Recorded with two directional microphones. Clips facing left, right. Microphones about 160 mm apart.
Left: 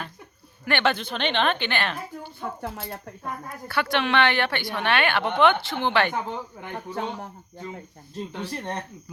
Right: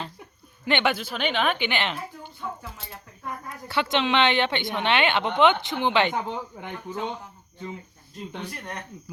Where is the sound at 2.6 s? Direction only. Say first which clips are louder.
Left 8 dB; 60° left (ahead or behind).